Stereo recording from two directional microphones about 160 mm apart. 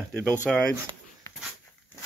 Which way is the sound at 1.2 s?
20° left (ahead or behind).